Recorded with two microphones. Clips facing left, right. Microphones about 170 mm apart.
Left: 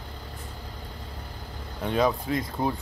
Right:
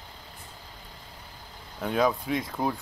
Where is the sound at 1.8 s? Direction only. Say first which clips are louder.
Left 1 dB; centre (ahead or behind).